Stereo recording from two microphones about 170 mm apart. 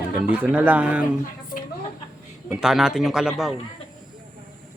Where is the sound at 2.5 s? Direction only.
5° right (ahead or behind).